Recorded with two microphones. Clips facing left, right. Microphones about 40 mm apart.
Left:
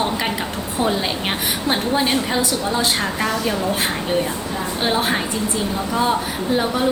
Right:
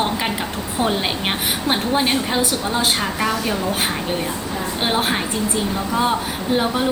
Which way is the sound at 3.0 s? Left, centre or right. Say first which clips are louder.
Even; centre.